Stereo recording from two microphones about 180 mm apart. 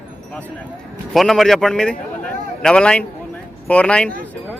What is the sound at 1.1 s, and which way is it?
A man's voice, centre (ahead or behind).